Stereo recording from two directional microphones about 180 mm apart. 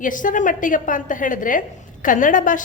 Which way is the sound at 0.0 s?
45° left (ahead or behind).